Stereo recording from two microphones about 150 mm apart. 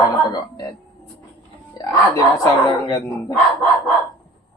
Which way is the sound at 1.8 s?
25° left (ahead or behind).